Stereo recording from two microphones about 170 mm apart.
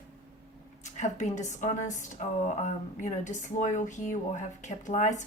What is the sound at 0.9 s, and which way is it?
Speech, 45° left (ahead or behind).